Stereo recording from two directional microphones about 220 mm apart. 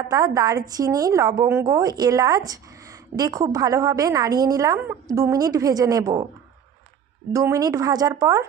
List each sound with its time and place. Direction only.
0.1 s a woman's voice: 15° right (ahead or behind)
7.3 s a woman's voice: 15° right (ahead or behind)